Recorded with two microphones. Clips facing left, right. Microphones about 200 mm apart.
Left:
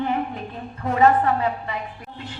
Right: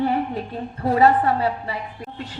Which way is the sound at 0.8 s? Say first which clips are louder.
Right 1 dB; 35° right (ahead or behind).